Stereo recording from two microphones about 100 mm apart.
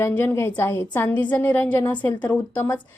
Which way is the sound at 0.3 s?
25° left (ahead or behind).